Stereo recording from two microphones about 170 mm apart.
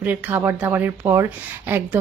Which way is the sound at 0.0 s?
10° right (ahead or behind).